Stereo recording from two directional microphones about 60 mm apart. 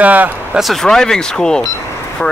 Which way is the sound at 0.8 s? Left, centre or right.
Centre.